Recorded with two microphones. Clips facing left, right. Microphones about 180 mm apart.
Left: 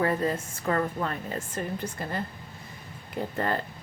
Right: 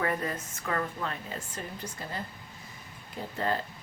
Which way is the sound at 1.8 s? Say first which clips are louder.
Left 6 dB; 55° left (ahead or behind).